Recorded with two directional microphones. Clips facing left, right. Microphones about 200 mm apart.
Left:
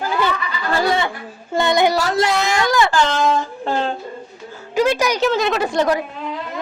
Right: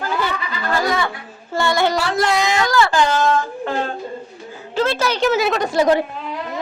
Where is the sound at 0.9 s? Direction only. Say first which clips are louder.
Left 3 dB; 25° left (ahead or behind).